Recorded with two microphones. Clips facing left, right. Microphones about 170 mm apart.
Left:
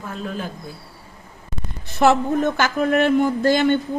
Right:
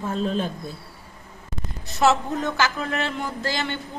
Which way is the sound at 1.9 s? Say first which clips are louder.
Left 4 dB; 55° left (ahead or behind).